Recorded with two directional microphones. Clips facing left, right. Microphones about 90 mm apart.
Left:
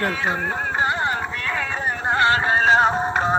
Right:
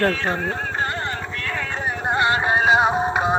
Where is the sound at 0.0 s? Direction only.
10° left (ahead or behind).